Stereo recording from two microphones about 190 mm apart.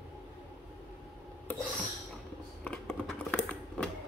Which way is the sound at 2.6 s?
10° left (ahead or behind).